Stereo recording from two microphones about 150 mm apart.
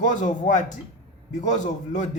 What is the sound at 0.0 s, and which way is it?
A man's voice, 55° left (ahead or behind).